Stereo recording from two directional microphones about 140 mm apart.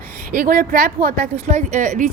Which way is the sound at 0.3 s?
90° right.